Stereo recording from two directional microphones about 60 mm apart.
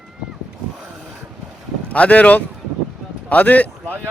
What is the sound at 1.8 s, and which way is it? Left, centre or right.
Speech, left.